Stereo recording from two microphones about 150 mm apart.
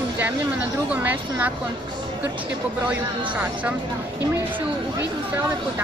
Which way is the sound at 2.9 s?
10° right (ahead or behind).